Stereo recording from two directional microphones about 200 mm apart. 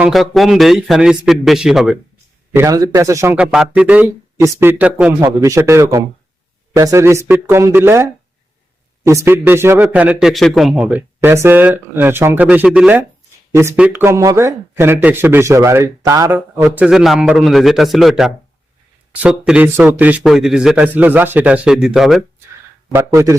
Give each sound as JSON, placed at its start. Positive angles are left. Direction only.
{"t": 0.0, "sound": "a man's voice", "side_deg": 0}
{"t": 2.6, "sound": "a man's voice", "side_deg": -15}
{"t": 16.6, "sound": "a man's voice", "side_deg": -5}
{"t": 22.9, "sound": "a man's voice", "side_deg": -15}